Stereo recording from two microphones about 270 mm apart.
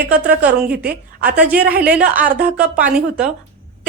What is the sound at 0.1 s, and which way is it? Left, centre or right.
A woman's voice, centre.